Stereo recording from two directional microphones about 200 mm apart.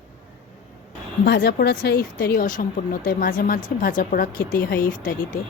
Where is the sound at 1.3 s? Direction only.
55° left (ahead or behind).